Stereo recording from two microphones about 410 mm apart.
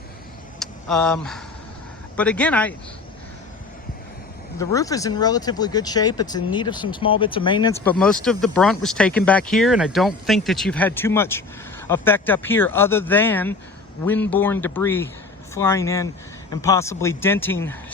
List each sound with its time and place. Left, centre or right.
0.6 s speech: centre
4.5 s a man's voice: centre